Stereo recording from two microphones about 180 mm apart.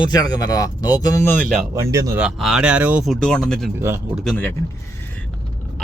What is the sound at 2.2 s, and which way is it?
Speech, 5° right (ahead or behind).